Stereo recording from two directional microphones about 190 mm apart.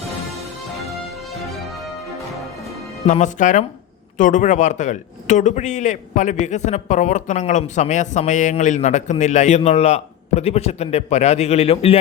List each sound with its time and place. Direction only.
3.1 s a man's voice: 40° left (ahead or behind)